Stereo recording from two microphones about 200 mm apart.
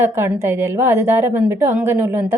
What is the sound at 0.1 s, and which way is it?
A woman's voice, 10° right (ahead or behind).